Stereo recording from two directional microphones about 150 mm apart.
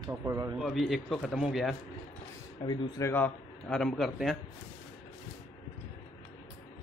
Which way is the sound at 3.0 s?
15° left (ahead or behind).